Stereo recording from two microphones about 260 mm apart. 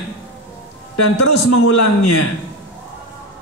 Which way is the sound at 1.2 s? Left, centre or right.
Left.